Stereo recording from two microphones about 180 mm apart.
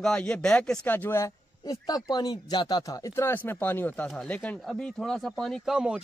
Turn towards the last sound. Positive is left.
turn(degrees=-5)  # may be behind; listen again after turning